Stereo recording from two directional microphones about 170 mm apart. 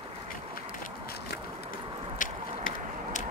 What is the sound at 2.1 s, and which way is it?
Biting, 50° left (ahead or behind).